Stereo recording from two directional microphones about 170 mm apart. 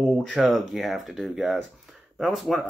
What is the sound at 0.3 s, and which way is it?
Speech, centre (ahead or behind).